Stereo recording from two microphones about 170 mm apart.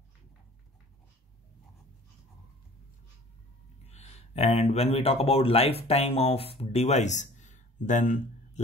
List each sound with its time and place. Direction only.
3.8 s speech: 40° left (ahead or behind)